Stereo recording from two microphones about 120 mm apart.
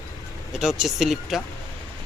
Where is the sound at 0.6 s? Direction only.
5° right (ahead or behind).